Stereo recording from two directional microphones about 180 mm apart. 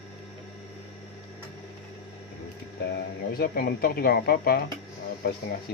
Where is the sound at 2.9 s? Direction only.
55° left (ahead or behind).